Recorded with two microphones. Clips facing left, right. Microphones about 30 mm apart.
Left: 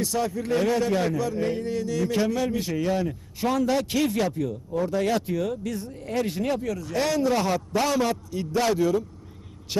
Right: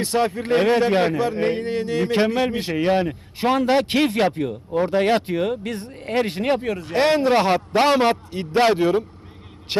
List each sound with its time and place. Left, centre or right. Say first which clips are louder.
0.0 s a man's voice: right 5 dB; right